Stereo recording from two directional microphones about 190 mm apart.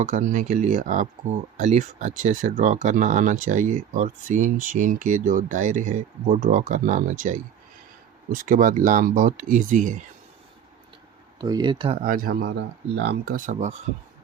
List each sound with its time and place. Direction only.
0.0 s speech: 45° right (ahead or behind)
11.3 s speech: 20° right (ahead or behind)
12.0 s speech: 50° right (ahead or behind)